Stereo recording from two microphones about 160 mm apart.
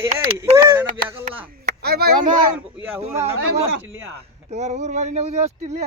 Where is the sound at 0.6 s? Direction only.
15° right (ahead or behind).